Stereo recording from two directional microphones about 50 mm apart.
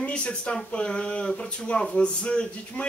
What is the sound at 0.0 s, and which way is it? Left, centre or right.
Speech, left.